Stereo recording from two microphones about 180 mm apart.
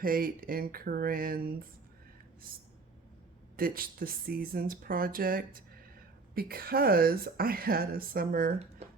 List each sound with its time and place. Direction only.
0.0 s speech: 50° right (ahead or behind)
3.6 s speech: 55° right (ahead or behind)